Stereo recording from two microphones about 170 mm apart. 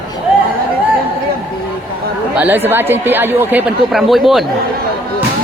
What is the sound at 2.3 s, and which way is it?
Speech, 10° right (ahead or behind).